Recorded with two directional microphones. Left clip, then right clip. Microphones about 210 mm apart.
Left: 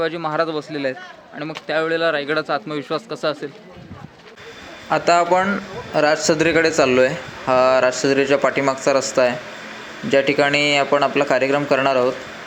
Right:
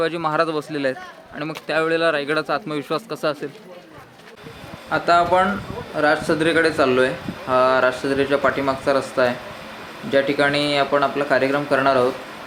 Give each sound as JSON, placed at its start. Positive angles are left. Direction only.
{"t": 0.0, "sound": "a man's voice", "side_deg": -10}
{"t": 4.9, "sound": "speech", "side_deg": 20}
{"t": 10.3, "sound": "speech", "side_deg": 25}